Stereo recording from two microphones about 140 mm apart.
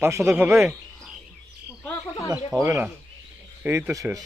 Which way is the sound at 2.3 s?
25° right (ahead or behind).